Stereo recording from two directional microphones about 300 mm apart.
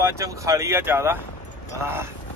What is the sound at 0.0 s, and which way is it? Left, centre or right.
Speech, centre.